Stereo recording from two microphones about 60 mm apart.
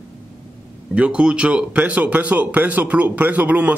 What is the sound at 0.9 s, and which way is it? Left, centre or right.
Speech, centre.